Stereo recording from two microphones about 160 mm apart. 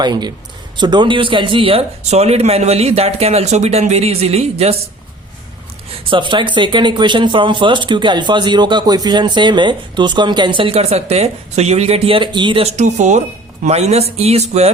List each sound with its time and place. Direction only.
0.0 s speech: 25° right (ahead or behind)
6.1 s speech: 30° right (ahead or behind)
12.6 s speech: 45° right (ahead or behind)